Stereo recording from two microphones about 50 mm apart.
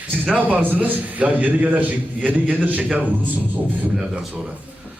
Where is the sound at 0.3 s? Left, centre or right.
Right.